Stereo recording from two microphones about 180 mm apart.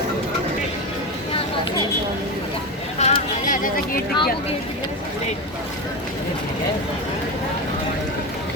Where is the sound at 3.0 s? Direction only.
35° left (ahead or behind).